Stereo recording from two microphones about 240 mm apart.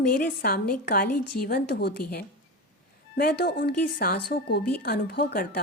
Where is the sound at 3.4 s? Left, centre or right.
Left.